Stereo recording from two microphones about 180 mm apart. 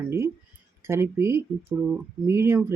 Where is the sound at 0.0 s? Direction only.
15° right (ahead or behind).